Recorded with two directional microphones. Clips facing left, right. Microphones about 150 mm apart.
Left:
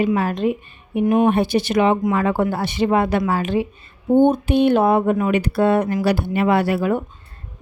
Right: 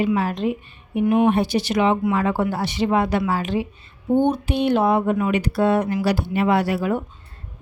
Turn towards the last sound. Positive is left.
turn(degrees=55)  # may be behind; listen again after turning